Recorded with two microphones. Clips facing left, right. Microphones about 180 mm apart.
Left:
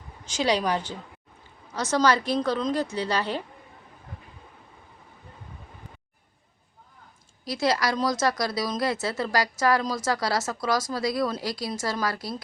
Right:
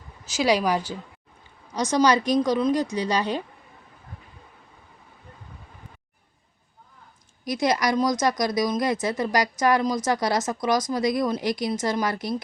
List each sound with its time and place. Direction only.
0.3 s speech: 10° right (ahead or behind)
7.4 s a woman's voice: 20° right (ahead or behind)